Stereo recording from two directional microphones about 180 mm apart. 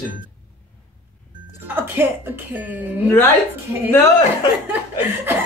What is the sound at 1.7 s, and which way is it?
Speech, 10° right (ahead or behind).